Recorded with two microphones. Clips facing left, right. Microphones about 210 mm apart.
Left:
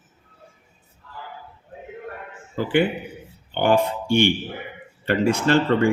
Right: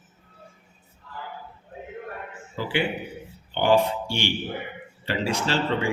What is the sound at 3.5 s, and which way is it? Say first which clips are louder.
Speech: left 1 dB; 50° left (ahead or behind).